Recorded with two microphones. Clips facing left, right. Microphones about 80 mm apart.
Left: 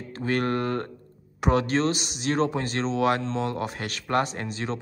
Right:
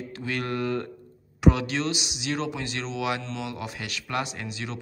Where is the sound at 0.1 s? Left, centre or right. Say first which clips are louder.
Left 6 dB; left.